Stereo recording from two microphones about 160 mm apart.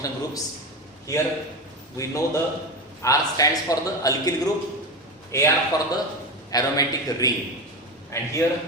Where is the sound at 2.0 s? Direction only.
20° left (ahead or behind).